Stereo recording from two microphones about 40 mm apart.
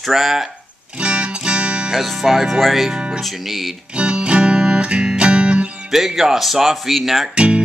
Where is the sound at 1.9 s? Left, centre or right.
Centre.